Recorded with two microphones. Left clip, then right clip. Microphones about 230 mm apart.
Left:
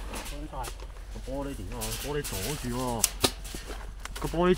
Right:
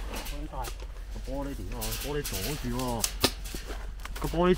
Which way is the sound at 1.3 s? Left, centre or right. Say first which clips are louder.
Left 1 dB; left.